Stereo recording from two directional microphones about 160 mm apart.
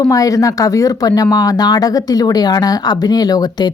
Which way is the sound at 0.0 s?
20° left (ahead or behind).